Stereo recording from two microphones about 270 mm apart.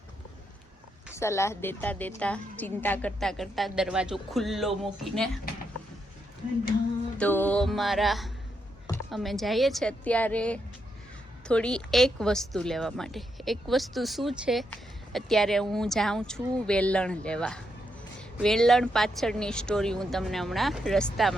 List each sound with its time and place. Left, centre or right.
1.1 s a woman's voice: centre
7.2 s a woman's voice: centre